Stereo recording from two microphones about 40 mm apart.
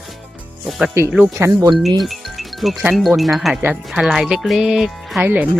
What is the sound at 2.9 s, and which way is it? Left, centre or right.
Speech, centre.